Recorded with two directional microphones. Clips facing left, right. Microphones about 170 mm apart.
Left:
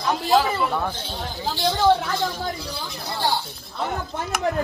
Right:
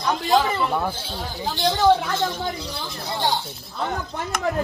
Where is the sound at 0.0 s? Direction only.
Centre (ahead or behind).